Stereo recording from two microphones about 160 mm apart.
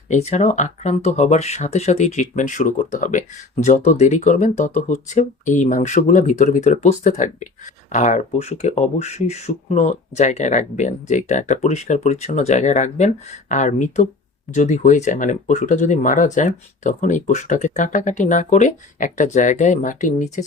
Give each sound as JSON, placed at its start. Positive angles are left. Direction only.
{"t": 0.1, "sound": "speech", "side_deg": 45}